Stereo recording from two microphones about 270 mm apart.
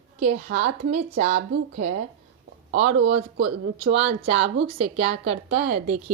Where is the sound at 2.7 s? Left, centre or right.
Right.